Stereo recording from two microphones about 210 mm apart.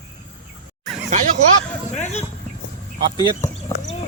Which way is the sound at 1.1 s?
35° right (ahead or behind).